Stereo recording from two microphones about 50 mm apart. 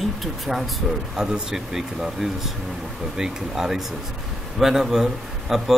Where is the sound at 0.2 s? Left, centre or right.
Centre.